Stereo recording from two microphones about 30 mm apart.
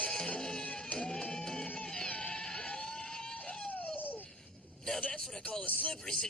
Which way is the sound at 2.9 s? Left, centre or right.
Left.